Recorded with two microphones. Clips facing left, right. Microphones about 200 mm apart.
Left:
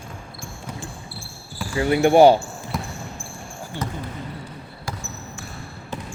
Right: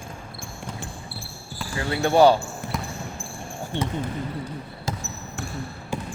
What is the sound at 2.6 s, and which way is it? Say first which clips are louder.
Basketball bounce: left 1 dB; 60° right (ahead or behind).